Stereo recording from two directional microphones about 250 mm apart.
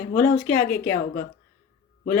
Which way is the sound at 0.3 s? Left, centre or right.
Centre.